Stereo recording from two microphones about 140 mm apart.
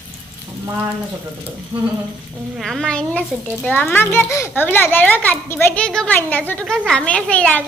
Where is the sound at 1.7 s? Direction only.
25° right (ahead or behind).